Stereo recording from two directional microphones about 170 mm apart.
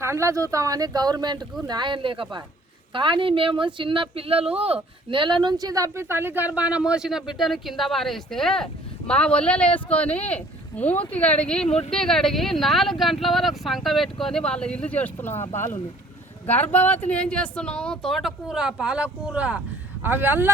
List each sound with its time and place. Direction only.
0.0 s a woman's voice: 15° right (ahead or behind); by 15.4 s 10° left (ahead or behind)
16.5 s a woman's voice: 10° left (ahead or behind); by 20.5 s 10° right (ahead or behind)